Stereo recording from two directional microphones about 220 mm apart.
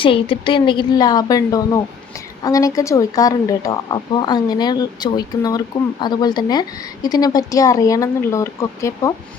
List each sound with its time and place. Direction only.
0.0 s speech: 25° left (ahead or behind)